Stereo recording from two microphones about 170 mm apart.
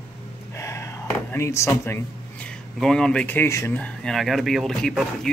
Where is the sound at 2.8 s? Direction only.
5° left (ahead or behind).